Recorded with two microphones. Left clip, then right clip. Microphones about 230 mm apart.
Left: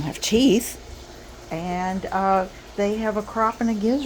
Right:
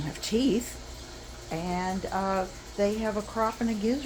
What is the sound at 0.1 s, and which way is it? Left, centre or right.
Speech, left.